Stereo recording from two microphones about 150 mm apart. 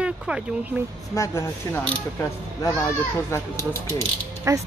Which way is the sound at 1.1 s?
20° left (ahead or behind).